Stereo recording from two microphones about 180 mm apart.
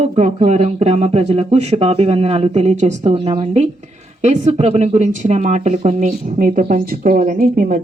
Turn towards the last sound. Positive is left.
turn(degrees=-55)  # may be behind; listen again after turning